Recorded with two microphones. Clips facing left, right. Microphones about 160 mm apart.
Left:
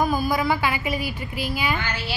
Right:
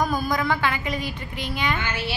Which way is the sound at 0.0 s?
5° left (ahead or behind).